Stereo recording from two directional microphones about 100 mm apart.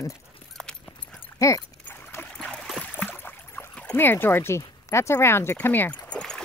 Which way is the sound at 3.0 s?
15° left (ahead or behind).